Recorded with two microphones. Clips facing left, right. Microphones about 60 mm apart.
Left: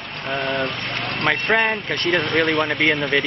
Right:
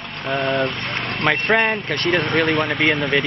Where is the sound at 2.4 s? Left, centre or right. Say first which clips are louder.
Right 1 dB; centre.